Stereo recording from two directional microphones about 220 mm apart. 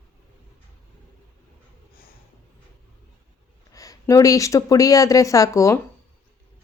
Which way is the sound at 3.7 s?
15° left (ahead or behind).